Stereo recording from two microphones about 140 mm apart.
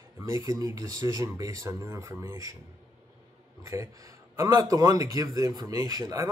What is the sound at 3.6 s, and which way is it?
Speech, 20° right (ahead or behind).